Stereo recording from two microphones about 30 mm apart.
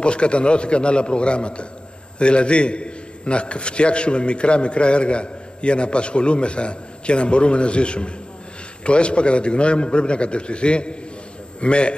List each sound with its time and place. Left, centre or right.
0.0 s a man's voice: left